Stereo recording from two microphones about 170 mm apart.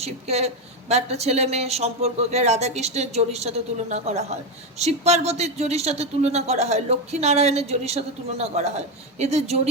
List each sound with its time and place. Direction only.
0.0 s speech: 40° right (ahead or behind)